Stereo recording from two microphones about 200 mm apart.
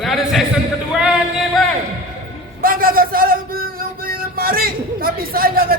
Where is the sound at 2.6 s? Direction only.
45° right (ahead or behind).